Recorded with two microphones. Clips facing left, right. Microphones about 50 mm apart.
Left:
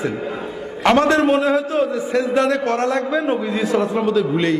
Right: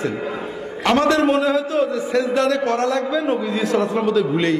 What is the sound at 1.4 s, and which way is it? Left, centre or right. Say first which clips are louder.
A man's voice: left 1 dB; left.